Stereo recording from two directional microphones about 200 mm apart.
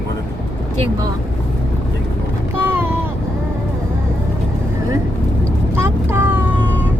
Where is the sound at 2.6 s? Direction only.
10° right (ahead or behind).